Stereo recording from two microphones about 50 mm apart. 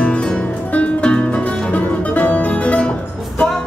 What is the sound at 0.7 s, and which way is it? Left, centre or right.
Music, centre.